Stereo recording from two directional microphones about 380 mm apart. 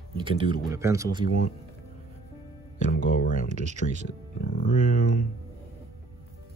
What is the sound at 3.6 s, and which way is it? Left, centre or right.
Speech, centre.